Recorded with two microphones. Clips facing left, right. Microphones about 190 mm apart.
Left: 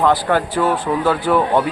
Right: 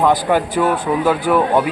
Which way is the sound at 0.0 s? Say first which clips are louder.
Right 1 dB; 15° right (ahead or behind).